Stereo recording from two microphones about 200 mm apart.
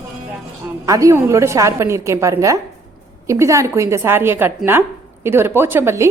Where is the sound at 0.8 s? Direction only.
15° right (ahead or behind).